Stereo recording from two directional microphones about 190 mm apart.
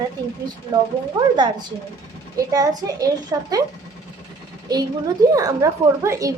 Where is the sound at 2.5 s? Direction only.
20° right (ahead or behind).